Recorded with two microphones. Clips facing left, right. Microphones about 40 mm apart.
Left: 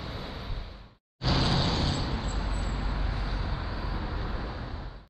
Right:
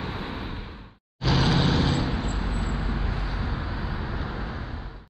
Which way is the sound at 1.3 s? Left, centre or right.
Centre.